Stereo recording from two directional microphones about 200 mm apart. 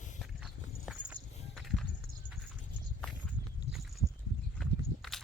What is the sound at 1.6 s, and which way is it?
Music, centre (ahead or behind).